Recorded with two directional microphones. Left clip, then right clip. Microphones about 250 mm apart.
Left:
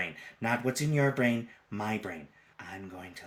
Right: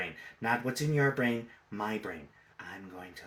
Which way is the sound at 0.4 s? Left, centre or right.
Left.